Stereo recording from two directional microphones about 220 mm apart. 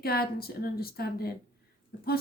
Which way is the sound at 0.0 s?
45° left (ahead or behind).